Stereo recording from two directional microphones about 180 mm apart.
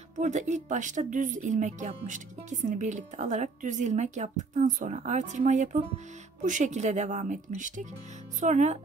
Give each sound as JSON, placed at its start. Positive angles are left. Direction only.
{"t": 0.2, "sound": "speech", "side_deg": -40}